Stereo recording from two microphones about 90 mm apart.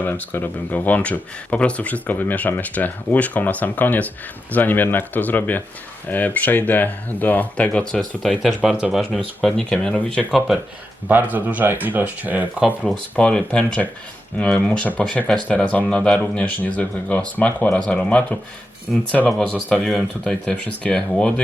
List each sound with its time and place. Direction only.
0.0 s speech: 20° left (ahead or behind)
8.4 s speech: centre (ahead or behind)
10.3 s speech: 5° right (ahead or behind)
11.1 s speech: 20° right (ahead or behind)
13.1 s speech: 10° left (ahead or behind); by 20.1 s 5° right (ahead or behind)
20.2 s speech: 10° left (ahead or behind)